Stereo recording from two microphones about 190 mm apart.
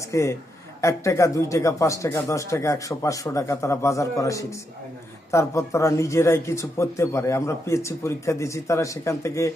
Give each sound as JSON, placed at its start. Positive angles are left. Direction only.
{"t": 0.1, "sound": "speech", "side_deg": 15}